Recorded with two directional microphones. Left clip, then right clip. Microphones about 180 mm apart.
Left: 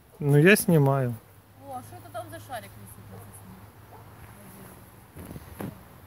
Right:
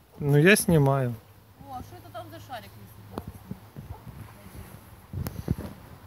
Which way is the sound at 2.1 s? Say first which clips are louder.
Left 2 dB; 5° left (ahead or behind).